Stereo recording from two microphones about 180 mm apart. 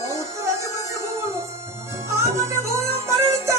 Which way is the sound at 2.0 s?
15° right (ahead or behind).